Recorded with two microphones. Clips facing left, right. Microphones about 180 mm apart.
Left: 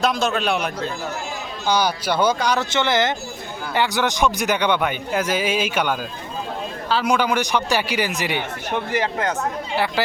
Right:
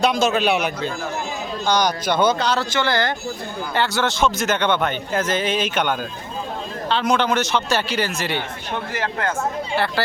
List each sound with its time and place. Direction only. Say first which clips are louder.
0.0 s a man's voice: right 2 dB; centre (ahead or behind)
1.6 s a man's voice: even; 10° left (ahead or behind)
2.6 s a man's voice: left 1 dB; 20° left (ahead or behind)